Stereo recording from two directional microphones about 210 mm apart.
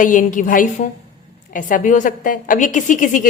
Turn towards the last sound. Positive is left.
turn(degrees=40)  # may be behind; listen again after turning